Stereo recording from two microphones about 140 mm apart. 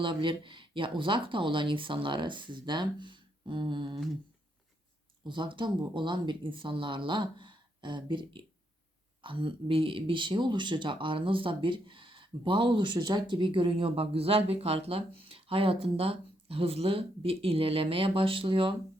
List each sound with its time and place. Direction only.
0.0 s speech: 35° right (ahead or behind)
5.2 s speech: 35° right (ahead or behind)